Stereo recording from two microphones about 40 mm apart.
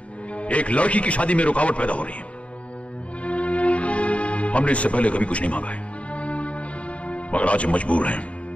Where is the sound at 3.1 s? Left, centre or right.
Left.